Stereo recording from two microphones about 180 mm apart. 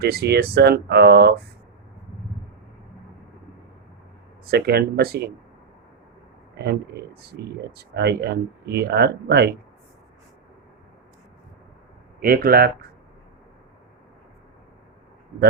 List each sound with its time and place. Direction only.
0.0 s speech: 65° right (ahead or behind)
4.5 s speech: 60° right (ahead or behind)
6.6 s speech: 65° right (ahead or behind)
12.2 s speech: 55° right (ahead or behind)